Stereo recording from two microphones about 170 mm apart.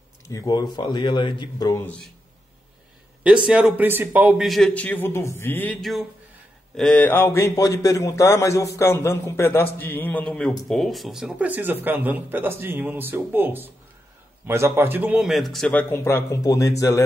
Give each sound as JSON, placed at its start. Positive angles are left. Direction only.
{"t": 0.3, "sound": "speech", "side_deg": 20}
{"t": 1.9, "sound": "a man's voice", "side_deg": 5}
{"t": 3.3, "sound": "a man's voice", "side_deg": -5}